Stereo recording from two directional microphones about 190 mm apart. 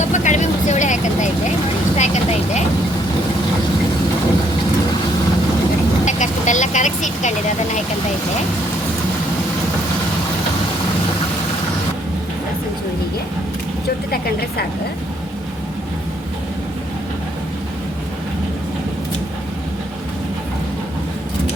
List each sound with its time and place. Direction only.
0.0 s vehicle: 40° left (ahead or behind)
6.1 s vehicle: 40° left (ahead or behind)